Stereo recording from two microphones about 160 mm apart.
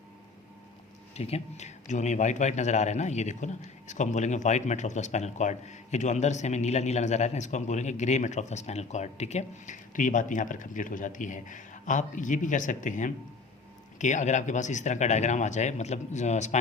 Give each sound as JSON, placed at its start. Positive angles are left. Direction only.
{"t": 1.1, "sound": "a man's voice", "side_deg": 40}